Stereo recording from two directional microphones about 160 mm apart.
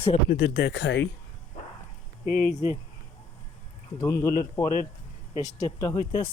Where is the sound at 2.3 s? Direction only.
10° left (ahead or behind).